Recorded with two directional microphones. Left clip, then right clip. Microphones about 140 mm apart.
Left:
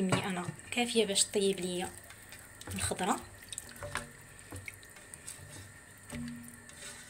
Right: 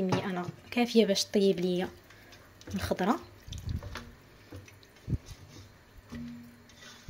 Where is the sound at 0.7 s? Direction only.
45° right (ahead or behind).